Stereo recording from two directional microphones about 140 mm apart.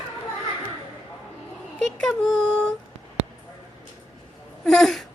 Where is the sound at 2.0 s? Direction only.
Centre (ahead or behind).